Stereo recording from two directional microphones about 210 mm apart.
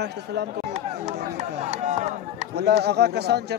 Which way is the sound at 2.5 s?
50° right (ahead or behind).